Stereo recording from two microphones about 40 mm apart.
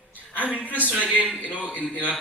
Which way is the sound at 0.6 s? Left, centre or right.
Left.